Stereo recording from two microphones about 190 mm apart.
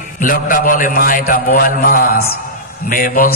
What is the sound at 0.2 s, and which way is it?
A man's voice, 45° left (ahead or behind).